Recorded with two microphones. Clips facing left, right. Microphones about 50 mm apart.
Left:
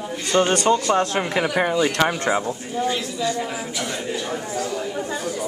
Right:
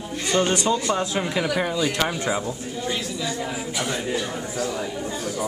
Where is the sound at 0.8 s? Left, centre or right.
Left.